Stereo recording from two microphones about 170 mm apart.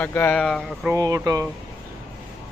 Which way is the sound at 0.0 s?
10° left (ahead or behind).